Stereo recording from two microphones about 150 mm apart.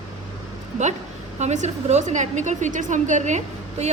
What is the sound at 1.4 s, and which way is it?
A woman's voice, 50° right (ahead or behind).